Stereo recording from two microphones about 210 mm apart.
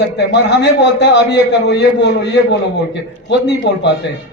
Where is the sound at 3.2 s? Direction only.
55° left (ahead or behind).